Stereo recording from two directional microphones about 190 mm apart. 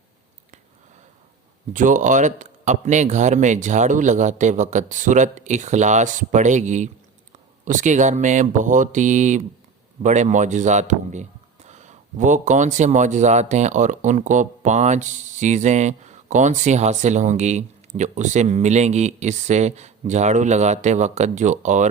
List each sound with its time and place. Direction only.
1.7 s speech: 40° right (ahead or behind)